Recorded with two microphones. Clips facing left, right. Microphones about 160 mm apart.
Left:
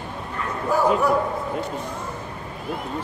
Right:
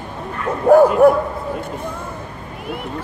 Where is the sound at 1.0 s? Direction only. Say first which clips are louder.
Right 9 dB; 55° right (ahead or behind).